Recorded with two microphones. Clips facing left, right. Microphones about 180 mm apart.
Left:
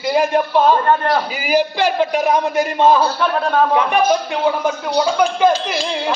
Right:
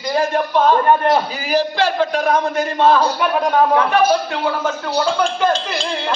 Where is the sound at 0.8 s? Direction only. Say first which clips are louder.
Right 2 dB; 20° right (ahead or behind).